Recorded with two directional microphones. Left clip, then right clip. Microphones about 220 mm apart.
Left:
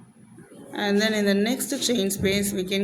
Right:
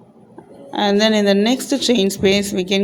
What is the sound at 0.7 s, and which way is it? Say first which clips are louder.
Speech: right 8 dB; 25° right (ahead or behind).